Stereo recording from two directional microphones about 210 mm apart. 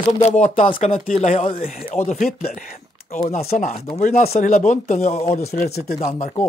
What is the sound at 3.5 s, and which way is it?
Speech, 30° left (ahead or behind).